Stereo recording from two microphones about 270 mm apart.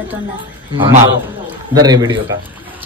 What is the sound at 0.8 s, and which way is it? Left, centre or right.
Speech, right.